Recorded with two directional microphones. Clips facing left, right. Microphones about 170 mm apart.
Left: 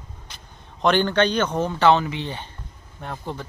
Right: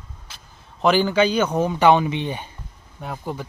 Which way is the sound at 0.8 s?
5° right (ahead or behind).